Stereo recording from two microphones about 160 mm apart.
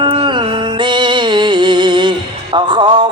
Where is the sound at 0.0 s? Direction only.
30° right (ahead or behind).